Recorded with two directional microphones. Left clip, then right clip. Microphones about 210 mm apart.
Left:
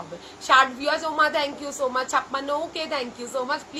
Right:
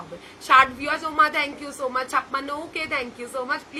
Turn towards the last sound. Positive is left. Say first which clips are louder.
# even
turn(degrees=-15)  # may be behind; listen again after turning